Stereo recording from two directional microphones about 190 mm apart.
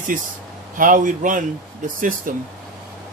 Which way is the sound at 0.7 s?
45° right (ahead or behind).